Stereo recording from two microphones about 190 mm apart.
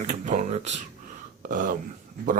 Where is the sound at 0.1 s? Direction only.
40° right (ahead or behind).